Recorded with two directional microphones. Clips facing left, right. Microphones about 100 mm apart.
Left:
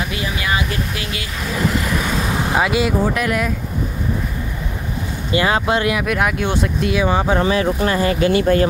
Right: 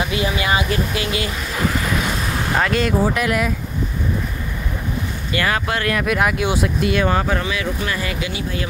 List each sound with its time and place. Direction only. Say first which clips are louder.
0.2 s speech: right 2 dB; 25° right (ahead or behind)
2.5 s speech: left 1 dB; 10° left (ahead or behind)
3.1 s speech: even; centre (ahead or behind)
5.3 s speech: left 4 dB; 20° left (ahead or behind)
5.9 s speech: even; centre (ahead or behind)
7.1 s speech: left 2 dB; 15° left (ahead or behind)
7.3 s speech: left 6 dB; 35° left (ahead or behind)
8.3 s speech: left 11 dB; 55° left (ahead or behind)